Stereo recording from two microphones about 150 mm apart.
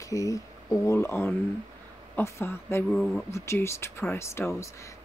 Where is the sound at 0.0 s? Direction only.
20° left (ahead or behind).